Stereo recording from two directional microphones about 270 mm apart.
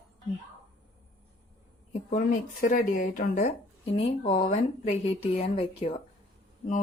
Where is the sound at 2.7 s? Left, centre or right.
Left.